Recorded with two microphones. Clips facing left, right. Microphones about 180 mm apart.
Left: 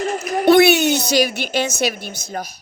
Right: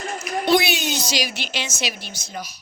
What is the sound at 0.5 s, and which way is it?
Speech, 60° left (ahead or behind).